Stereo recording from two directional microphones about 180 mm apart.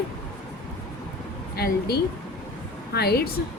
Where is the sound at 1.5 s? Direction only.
60° left (ahead or behind).